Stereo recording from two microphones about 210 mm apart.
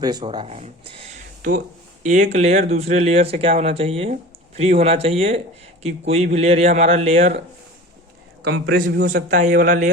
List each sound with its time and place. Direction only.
0.0 s speech: 20° right (ahead or behind)
8.4 s speech: 60° right (ahead or behind); by 9.9 s 40° right (ahead or behind)